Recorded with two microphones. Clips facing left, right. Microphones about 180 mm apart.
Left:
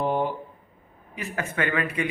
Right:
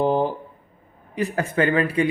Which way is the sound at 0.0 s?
30° right (ahead or behind).